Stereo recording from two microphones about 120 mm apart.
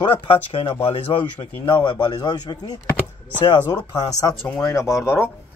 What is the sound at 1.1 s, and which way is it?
Speech, 45° left (ahead or behind).